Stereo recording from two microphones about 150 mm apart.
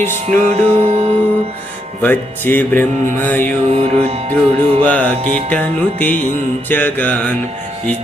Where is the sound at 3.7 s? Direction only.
40° right (ahead or behind).